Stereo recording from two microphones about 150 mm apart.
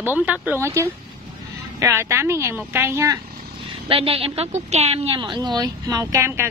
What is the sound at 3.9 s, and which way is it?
A woman's voice, 40° right (ahead or behind).